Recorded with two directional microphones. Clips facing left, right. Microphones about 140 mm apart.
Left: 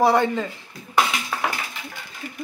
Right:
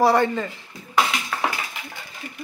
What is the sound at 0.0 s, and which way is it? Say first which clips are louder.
Speech: even; 15° left (ahead or behind).